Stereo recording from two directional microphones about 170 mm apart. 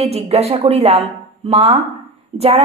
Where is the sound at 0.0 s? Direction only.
35° right (ahead or behind).